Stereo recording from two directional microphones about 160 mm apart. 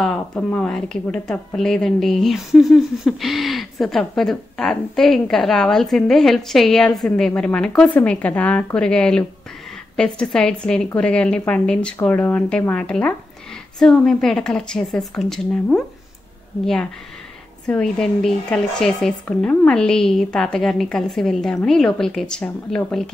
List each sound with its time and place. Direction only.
0.0 s speech: 5° left (ahead or behind)
17.6 s speech: 5° left (ahead or behind)